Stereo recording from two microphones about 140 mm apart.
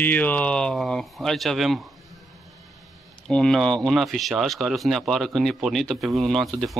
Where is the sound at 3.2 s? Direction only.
5° left (ahead or behind).